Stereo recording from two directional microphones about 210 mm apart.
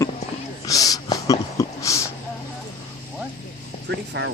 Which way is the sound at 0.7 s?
15° left (ahead or behind).